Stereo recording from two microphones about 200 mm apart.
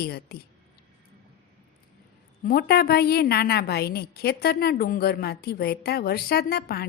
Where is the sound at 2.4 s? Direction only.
50° left (ahead or behind).